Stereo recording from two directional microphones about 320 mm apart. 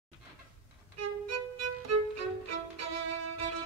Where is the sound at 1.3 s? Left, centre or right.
Right.